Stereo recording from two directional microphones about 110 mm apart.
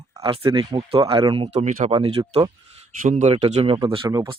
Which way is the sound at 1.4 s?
80° right.